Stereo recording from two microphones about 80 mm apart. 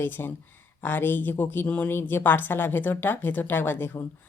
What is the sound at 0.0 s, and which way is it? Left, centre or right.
Speech, left.